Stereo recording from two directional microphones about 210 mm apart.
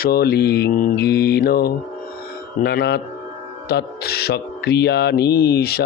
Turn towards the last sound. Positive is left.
turn(degrees=50)  # may be behind; listen again after turning